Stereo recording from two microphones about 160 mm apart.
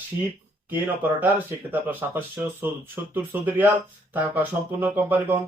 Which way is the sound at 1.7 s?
10° right (ahead or behind).